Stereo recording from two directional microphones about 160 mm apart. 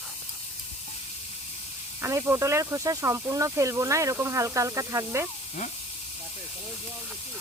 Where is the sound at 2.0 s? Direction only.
20° right (ahead or behind).